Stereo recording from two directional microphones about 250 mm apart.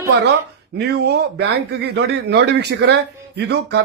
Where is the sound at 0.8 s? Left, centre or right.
Right.